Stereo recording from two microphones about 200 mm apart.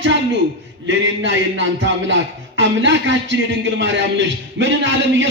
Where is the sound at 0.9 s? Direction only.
65° right (ahead or behind).